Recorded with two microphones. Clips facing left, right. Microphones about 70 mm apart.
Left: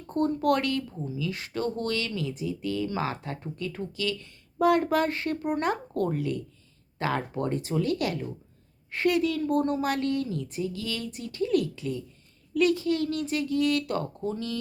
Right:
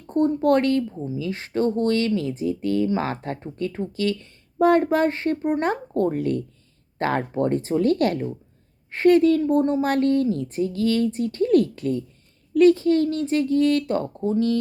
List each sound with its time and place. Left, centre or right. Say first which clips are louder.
0.1 s speech: right 6 dB; right
0.9 s speech: right 4 dB; right
6.1 s speech: right 6 dB; right
9.4 s speech: right 5 dB; right
9.9 s speech: right 8 dB; right